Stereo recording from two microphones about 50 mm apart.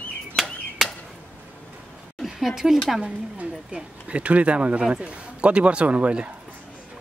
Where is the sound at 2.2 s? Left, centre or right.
Centre.